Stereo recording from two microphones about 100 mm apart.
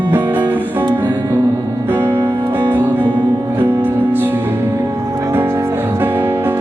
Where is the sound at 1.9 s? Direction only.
20° right (ahead or behind).